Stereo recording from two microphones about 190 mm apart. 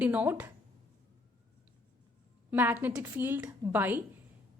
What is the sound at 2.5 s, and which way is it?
A woman's voice, 10° right (ahead or behind).